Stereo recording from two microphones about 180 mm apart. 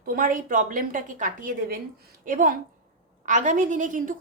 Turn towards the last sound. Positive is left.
turn(degrees=-45)  # may be behind; listen again after turning